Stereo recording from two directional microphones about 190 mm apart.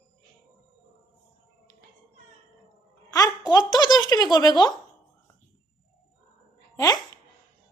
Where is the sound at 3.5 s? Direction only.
20° left (ahead or behind).